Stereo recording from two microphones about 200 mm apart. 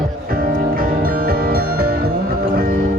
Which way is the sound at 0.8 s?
45° right (ahead or behind).